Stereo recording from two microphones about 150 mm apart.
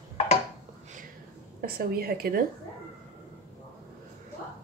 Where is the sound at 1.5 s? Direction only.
85° right.